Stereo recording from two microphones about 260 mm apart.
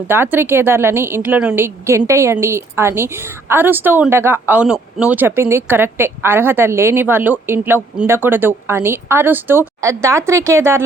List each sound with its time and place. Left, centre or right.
0.1 s a woman's voice: centre